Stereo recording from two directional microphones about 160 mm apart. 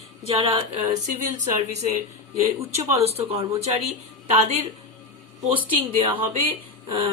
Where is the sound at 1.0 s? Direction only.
45° right (ahead or behind).